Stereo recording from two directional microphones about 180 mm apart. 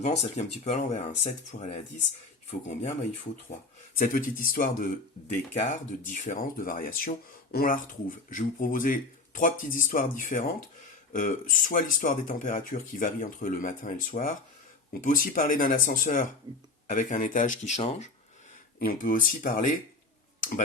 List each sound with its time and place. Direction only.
0.2 s speech: 40° left (ahead or behind)
3.9 s speech: 50° left (ahead or behind)
18.8 s speech: 50° left (ahead or behind)
20.4 s a sound: 45° left (ahead or behind)